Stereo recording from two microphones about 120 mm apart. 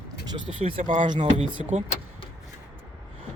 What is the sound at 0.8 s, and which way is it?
Speech, 90° right.